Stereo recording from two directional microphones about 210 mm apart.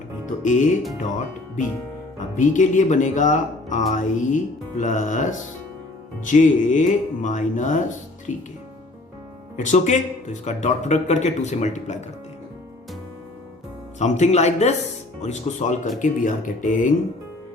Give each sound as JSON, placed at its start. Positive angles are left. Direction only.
{"t": 0.4, "sound": "a man's voice", "side_deg": 35}
{"t": 2.1, "sound": "a man's voice", "side_deg": 35}
{"t": 9.6, "sound": "a man's voice", "side_deg": 35}
{"t": 14.0, "sound": "a man's voice", "side_deg": 35}